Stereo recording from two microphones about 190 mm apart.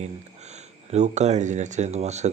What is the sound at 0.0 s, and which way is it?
Speech, 35° right (ahead or behind).